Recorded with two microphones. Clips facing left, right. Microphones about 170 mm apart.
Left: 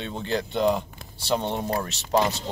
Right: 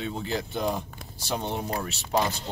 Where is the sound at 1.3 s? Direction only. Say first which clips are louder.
Left 4 dB; 35° left (ahead or behind).